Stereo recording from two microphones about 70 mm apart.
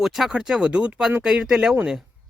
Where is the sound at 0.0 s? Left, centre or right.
Centre.